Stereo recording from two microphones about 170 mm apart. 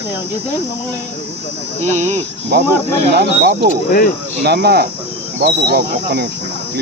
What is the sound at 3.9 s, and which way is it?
Speech, 55° left (ahead or behind).